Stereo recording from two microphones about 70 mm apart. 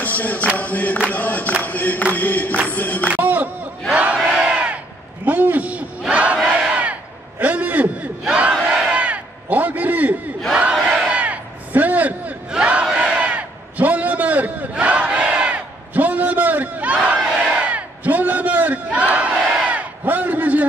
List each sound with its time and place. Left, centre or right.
0.0 s music: left
0.6 s chant: left
1.1 s a sound: left
2.1 s chant: left
3.1 s music: right
3.9 s battle cry: centre
4.2 s battle cry: centre
5.2 s battle cry: right
10.7 s a sound: centre
12.5 s battle cry: centre
12.8 s a sound: centre
17.4 s battle cry: centre